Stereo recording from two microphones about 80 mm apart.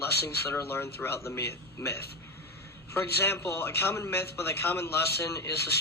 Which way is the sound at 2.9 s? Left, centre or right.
Left.